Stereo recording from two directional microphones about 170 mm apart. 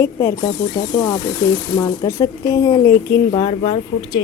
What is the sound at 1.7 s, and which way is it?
Speech, 20° left (ahead or behind).